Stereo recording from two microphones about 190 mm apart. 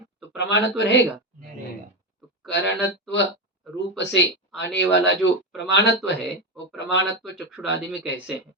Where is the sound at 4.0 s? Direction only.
65° left (ahead or behind).